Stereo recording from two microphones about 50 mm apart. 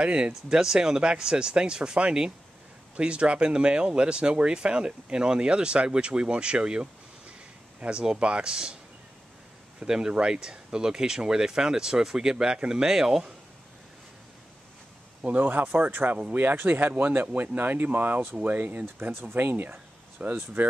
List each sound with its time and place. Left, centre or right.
0.0 s speech: right
0.3 s speech: centre
9.8 s speech: centre
15.2 s speech: right
19.1 s speech: right